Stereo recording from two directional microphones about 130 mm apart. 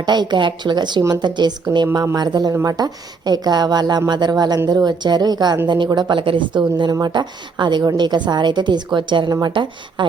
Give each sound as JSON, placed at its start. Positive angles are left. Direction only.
{"t": 0.0, "sound": "a woman's voice", "side_deg": -35}